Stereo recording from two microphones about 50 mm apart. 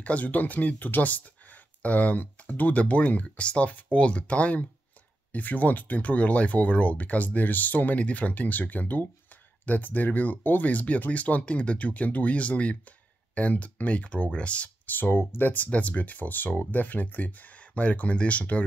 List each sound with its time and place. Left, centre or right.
0.0 s speech: left
14.9 s speech: left
15.5 s speech: left